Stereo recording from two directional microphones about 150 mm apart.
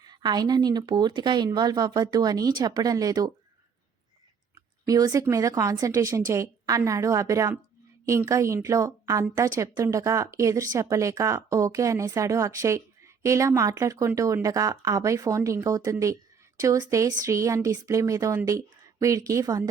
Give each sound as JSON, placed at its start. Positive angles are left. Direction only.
{"t": 0.0, "sound": "a woman's voice", "side_deg": -30}
{"t": 4.9, "sound": "a woman's voice", "side_deg": -25}